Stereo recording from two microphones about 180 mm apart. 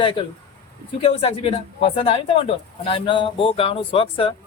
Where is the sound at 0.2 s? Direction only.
30° left (ahead or behind).